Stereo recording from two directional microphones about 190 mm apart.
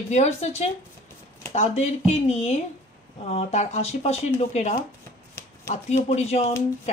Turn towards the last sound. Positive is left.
turn(degrees=35)  # may be behind; listen again after turning